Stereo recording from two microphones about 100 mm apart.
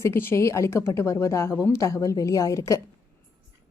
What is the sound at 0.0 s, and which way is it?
A woman's voice, 25° left (ahead or behind).